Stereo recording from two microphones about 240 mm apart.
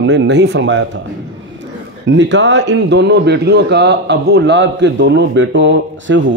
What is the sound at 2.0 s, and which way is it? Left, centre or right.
A man's voice, right.